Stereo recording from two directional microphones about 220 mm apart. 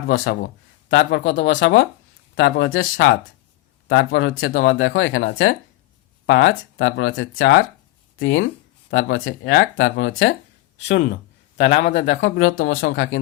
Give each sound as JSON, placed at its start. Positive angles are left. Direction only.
{"t": 0.1, "sound": "speech", "side_deg": 60}
{"t": 10.8, "sound": "speech", "side_deg": 50}